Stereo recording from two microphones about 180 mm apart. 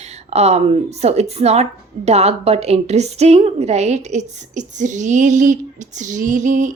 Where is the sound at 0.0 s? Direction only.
35° right (ahead or behind).